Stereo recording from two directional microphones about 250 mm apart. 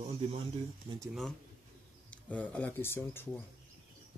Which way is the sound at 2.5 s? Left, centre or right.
Centre.